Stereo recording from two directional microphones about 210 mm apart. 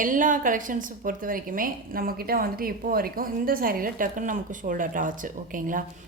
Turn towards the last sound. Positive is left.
turn(degrees=-40)  # may be behind; listen again after turning